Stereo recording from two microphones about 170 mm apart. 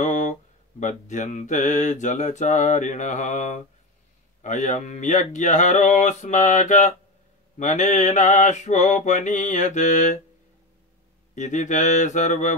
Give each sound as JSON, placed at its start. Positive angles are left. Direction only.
{"t": 0.0, "sound": "mantra", "side_deg": 45}
{"t": 11.3, "sound": "mantra", "side_deg": 45}